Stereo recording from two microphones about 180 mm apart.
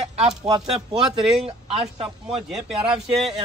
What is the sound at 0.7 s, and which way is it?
Speech, 30° right (ahead or behind).